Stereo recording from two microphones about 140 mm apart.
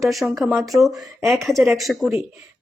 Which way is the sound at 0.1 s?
Centre (ahead or behind).